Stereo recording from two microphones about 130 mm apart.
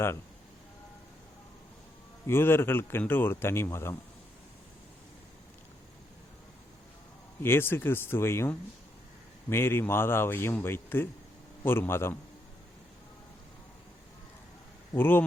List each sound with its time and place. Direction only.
2.2 s speech: 20° left (ahead or behind)
7.4 s a man's voice: 15° left (ahead or behind)
14.9 s speech: 15° left (ahead or behind)